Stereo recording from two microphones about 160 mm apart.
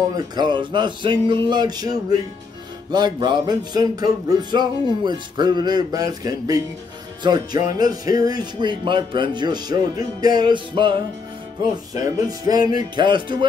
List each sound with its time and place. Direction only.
0.1 s music: 30° right (ahead or behind)